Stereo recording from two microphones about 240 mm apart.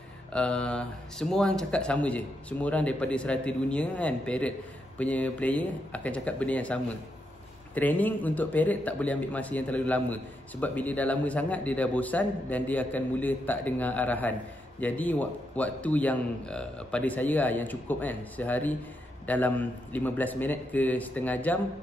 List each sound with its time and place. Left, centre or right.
0.3 s speech: centre